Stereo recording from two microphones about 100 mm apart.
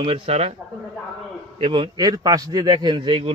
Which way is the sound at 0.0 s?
65° right (ahead or behind).